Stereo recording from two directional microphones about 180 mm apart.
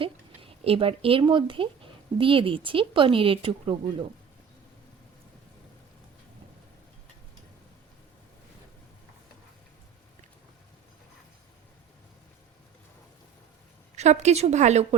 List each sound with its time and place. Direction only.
0.0 s speech: 30° right (ahead or behind)
13.9 s a woman's voice: 40° right (ahead or behind)